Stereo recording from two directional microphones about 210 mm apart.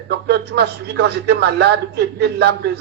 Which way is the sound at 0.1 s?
55° right (ahead or behind).